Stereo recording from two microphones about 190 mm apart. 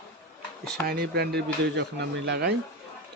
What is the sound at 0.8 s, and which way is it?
Speech, 55° right (ahead or behind).